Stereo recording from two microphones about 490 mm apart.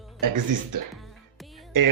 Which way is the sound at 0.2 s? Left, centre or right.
Right.